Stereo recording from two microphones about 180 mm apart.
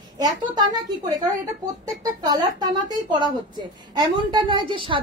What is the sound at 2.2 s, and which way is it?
A woman's voice, 20° right (ahead or behind).